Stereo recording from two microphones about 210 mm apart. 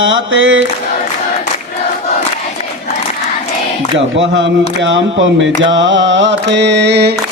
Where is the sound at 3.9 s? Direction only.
65° right (ahead or behind).